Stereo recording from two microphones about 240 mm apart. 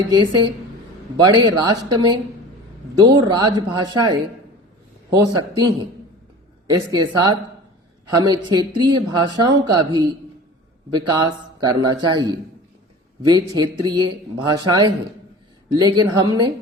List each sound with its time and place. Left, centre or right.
0.1 s speech: centre
3.0 s speech: centre